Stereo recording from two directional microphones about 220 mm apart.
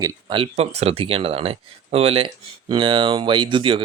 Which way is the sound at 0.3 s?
25° right (ahead or behind).